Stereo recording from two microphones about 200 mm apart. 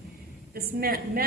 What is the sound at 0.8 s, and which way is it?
Speech, 50° right (ahead or behind).